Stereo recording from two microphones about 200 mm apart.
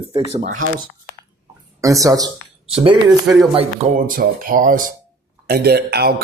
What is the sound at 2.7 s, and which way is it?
Speech, 30° right (ahead or behind).